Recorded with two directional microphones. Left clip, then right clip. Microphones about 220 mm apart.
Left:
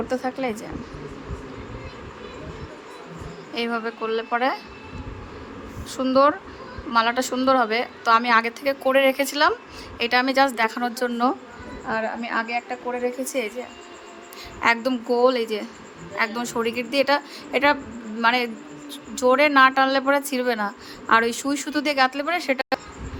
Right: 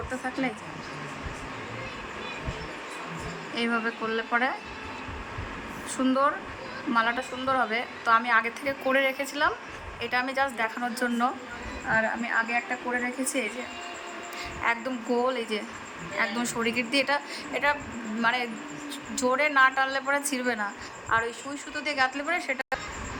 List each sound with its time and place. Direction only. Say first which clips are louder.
0.1 s a woman's voice: left 2 dB; 45° left (ahead or behind)
3.5 s a woman's voice: left 2 dB; 50° left (ahead or behind)
6.0 s a woman's voice: left 7 dB; 50° left (ahead or behind)
14.6 s a woman's voice: left 8 dB; 50° left (ahead or behind)